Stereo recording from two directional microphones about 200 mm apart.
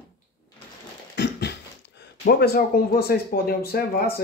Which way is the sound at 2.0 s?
55° left (ahead or behind).